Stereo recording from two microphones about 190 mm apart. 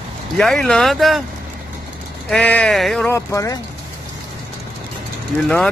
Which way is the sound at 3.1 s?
15° left (ahead or behind).